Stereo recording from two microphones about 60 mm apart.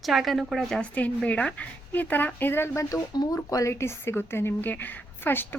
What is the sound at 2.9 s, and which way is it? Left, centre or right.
Speech, left.